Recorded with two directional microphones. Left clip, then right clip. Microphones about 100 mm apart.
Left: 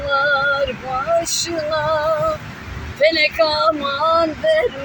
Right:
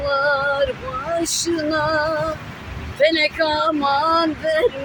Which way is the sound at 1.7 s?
30° right (ahead or behind).